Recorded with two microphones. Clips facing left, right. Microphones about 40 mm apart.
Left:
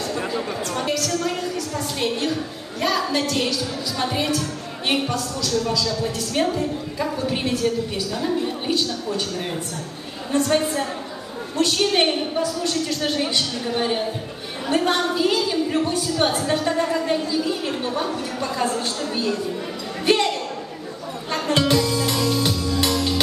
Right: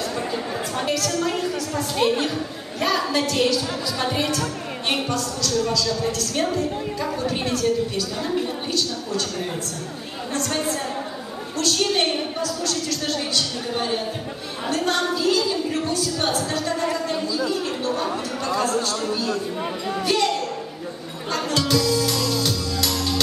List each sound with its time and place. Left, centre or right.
0.1 s a woman's voice: centre
10.3 s a woman's voice: centre
20.1 s a sound: left
21.5 s music: left